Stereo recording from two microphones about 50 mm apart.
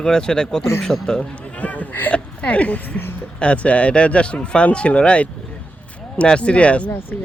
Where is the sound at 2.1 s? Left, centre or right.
Left.